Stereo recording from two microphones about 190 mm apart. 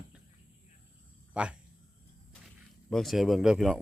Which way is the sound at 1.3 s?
5° right (ahead or behind).